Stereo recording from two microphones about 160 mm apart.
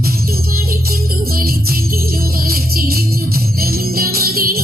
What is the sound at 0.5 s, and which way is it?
Music, 65° right (ahead or behind).